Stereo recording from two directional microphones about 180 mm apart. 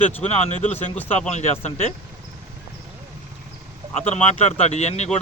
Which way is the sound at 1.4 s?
40° left (ahead or behind).